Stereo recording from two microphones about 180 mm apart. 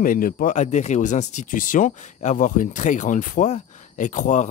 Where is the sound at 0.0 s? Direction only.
50° left (ahead or behind).